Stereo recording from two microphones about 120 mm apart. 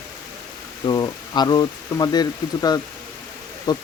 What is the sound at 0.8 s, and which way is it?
Speech, 35° left (ahead or behind).